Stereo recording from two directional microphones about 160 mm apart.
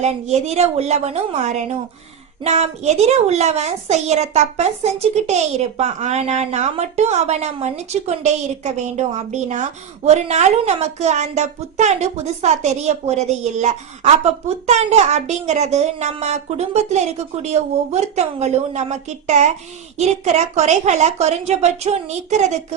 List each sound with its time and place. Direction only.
0.0 s a child's voice: 45° right (ahead or behind)